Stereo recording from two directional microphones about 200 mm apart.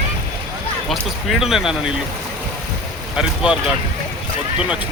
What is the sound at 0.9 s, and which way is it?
Speech, centre (ahead or behind).